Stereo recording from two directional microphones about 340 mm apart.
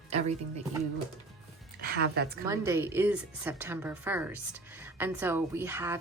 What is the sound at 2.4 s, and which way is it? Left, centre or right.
Speech, centre.